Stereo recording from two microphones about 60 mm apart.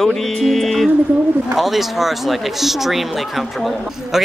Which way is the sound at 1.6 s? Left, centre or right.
Centre.